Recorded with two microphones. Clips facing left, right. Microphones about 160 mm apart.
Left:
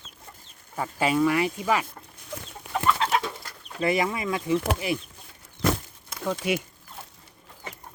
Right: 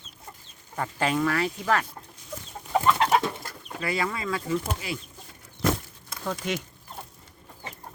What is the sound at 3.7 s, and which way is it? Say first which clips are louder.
Speech: left 4 dB; 20° left (ahead or behind).